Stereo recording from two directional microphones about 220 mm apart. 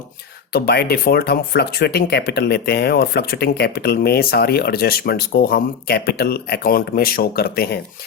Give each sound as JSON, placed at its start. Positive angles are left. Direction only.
{"t": 0.5, "sound": "speech", "side_deg": 45}